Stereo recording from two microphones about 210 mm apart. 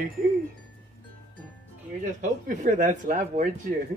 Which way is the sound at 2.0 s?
35° right (ahead or behind).